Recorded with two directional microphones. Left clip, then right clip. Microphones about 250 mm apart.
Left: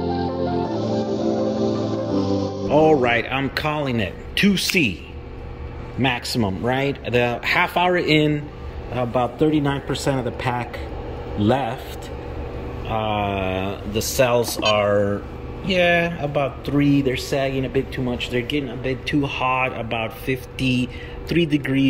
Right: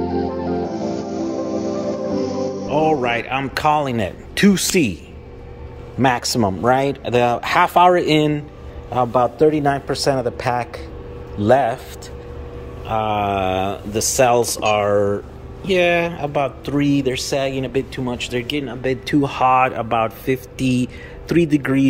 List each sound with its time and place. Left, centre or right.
0.0 s music: centre
4.5 s a woman's voice: right
5.9 s speech: centre
12.8 s speech: centre